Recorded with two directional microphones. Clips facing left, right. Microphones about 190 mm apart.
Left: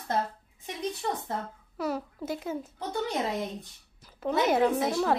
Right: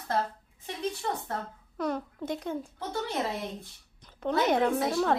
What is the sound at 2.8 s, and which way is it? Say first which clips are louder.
Speech: left 2 dB; 15° left (ahead or behind).